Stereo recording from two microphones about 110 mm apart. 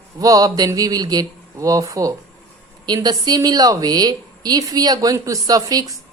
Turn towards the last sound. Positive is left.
turn(degrees=-35)  # may be behind; listen again after turning